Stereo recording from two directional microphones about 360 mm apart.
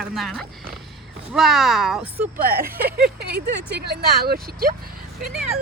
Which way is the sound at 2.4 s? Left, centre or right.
Right.